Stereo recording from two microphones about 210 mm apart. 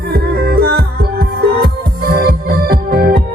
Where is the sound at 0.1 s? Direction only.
50° right (ahead or behind).